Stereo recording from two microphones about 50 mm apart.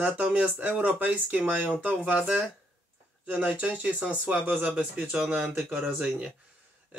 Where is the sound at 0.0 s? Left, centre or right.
Right.